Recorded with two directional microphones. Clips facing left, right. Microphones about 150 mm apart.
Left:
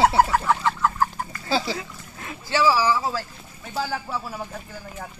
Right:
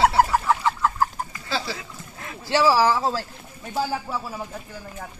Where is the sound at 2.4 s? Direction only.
35° right (ahead or behind).